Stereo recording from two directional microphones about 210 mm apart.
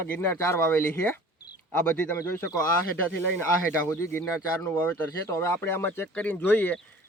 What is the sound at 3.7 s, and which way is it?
Speech, 10° left (ahead or behind).